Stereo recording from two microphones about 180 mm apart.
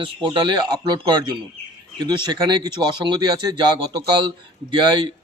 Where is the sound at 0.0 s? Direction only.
25° right (ahead or behind).